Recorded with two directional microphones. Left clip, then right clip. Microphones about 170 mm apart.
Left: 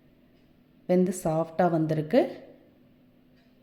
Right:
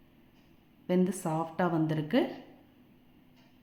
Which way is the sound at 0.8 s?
20° left (ahead or behind).